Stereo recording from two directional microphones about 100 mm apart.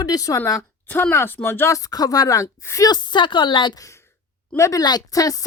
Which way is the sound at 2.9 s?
50° left (ahead or behind).